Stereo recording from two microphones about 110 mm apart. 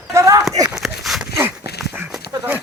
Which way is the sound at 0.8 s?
Centre (ahead or behind).